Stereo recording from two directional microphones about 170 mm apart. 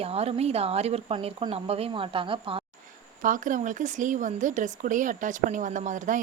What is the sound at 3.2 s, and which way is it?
Speech, 50° right (ahead or behind).